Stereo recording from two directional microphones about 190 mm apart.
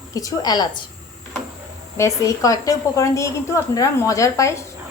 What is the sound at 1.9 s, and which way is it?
A woman's voice, 15° left (ahead or behind).